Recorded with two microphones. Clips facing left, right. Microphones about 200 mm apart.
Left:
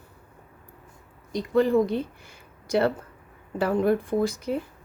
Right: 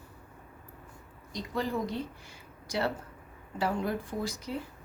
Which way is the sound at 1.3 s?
60° left (ahead or behind).